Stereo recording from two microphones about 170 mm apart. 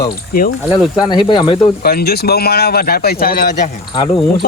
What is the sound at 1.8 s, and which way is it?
Speech, 65° left (ahead or behind).